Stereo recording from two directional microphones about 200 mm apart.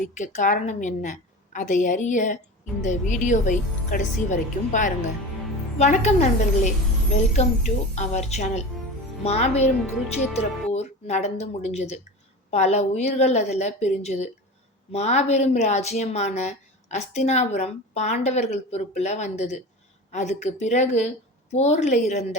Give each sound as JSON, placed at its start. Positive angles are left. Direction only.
{"t": 0.0, "sound": "speech", "side_deg": 40}
{"t": 7.3, "sound": "speech", "side_deg": 35}